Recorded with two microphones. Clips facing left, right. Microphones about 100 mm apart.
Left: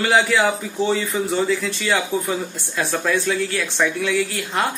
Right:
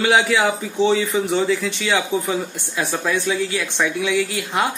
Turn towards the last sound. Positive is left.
turn(degrees=-15)  # may be behind; listen again after turning